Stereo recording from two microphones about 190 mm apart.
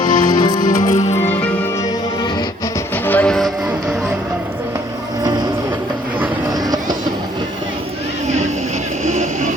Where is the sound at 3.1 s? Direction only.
5° left (ahead or behind).